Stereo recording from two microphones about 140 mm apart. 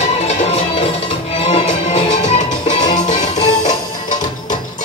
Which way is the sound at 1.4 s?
45° left (ahead or behind).